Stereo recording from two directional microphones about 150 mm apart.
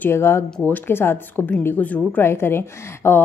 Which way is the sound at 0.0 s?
15° left (ahead or behind).